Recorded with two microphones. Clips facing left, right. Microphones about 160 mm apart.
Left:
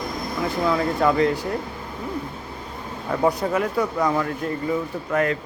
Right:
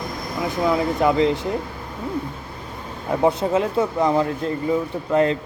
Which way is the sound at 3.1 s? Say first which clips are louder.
Right 2 dB; 25° right (ahead or behind).